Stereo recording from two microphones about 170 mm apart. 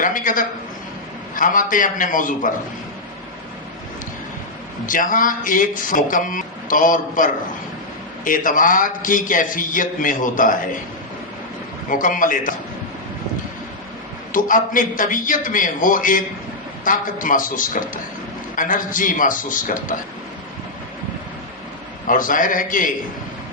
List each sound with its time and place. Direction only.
0.0 s speech: 50° left (ahead or behind)
4.9 s speech: 50° left (ahead or behind)
11.9 s speech: 50° left (ahead or behind)
14.3 s speech: 50° left (ahead or behind)
22.0 s speech: 50° left (ahead or behind)